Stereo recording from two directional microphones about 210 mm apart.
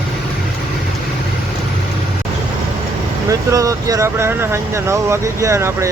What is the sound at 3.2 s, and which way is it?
Speech, 15° right (ahead or behind).